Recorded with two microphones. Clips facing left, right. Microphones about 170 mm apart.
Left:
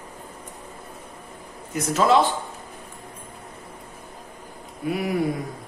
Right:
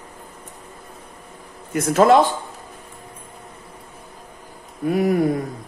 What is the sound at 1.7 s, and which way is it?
Speech, 55° right (ahead or behind).